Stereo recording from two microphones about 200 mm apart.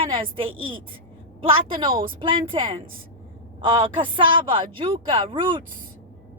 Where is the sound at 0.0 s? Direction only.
25° right (ahead or behind).